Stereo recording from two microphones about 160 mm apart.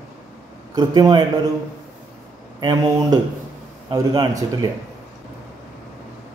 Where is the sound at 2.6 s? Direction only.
25° right (ahead or behind).